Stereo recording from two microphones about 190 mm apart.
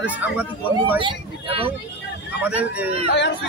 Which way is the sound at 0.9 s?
25° right (ahead or behind).